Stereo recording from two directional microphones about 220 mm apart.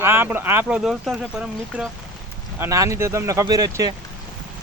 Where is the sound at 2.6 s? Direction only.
15° right (ahead or behind).